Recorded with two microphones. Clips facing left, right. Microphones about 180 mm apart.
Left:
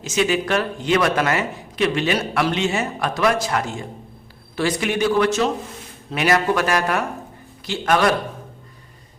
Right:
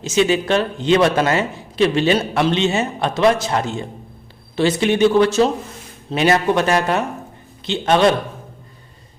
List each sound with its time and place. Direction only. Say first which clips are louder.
0.0 s a man's voice: right 4 dB; 25° right (ahead or behind)